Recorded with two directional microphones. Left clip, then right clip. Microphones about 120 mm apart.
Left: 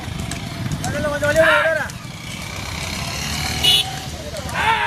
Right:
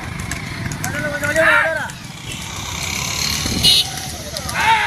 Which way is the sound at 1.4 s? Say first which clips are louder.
Right 1 dB; 40° left (ahead or behind).